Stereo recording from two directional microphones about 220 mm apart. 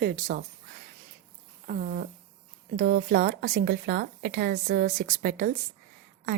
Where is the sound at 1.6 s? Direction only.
40° right (ahead or behind).